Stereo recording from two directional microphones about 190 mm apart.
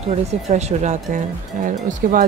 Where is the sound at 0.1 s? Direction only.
35° right (ahead or behind).